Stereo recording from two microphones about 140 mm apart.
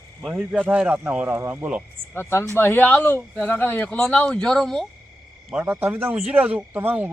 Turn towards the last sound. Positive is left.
turn(degrees=-15)  # may be behind; listen again after turning